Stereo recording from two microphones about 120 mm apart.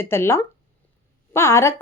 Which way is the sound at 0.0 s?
20° left (ahead or behind).